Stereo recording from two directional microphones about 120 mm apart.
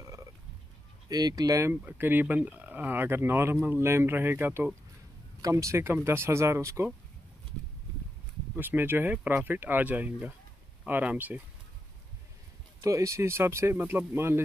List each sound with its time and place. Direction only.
1.0 s speech: 30° right (ahead or behind)
1.7 s speech: 15° right (ahead or behind)
8.5 s speech: 15° right (ahead or behind)
12.8 s speech: 25° right (ahead or behind)